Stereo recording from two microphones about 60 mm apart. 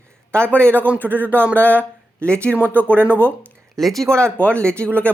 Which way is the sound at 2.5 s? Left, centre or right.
Right.